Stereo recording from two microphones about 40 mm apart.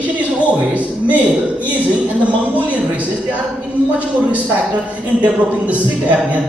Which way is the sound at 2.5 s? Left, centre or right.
Right.